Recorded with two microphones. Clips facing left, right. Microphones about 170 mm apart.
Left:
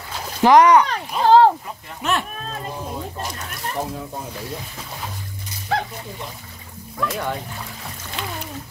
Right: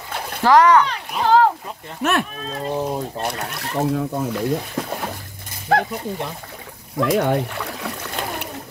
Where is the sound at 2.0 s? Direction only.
60° right (ahead or behind).